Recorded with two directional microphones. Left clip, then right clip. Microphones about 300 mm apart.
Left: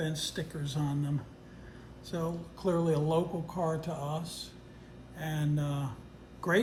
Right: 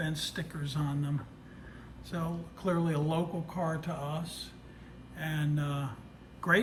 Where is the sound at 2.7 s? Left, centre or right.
Right.